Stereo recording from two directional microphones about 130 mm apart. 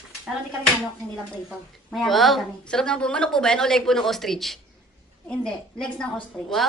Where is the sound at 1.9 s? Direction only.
Centre (ahead or behind).